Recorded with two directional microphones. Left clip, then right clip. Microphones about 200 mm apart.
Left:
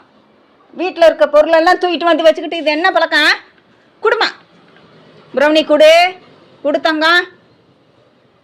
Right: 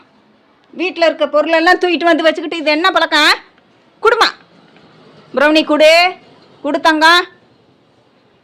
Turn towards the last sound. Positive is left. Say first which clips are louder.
# right 2 dB
turn(degrees=-15)  # may be behind; listen again after turning